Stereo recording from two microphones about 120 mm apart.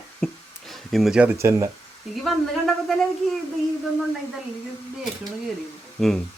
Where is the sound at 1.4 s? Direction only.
25° right (ahead or behind).